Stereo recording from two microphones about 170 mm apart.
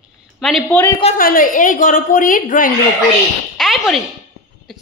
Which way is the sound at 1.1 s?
55° left (ahead or behind).